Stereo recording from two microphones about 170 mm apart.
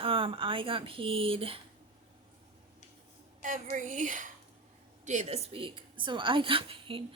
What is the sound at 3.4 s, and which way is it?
A woman's voice, 50° right (ahead or behind).